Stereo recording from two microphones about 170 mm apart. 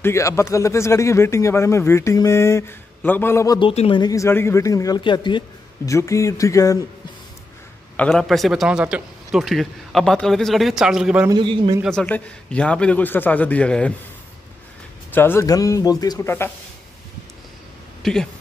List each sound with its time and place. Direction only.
0.0 s speech: 15° left (ahead or behind)
3.5 s speech: 30° left (ahead or behind)
8.0 s a man's voice: centre (ahead or behind)
11.2 s a man's voice: 30° right (ahead or behind)
11.8 s speech: 5° left (ahead or behind)
15.1 s speech: 15° left (ahead or behind)
18.0 s a man's voice: 5° left (ahead or behind)